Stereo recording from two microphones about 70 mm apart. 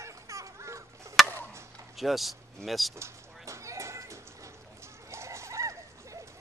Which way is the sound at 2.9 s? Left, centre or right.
Right.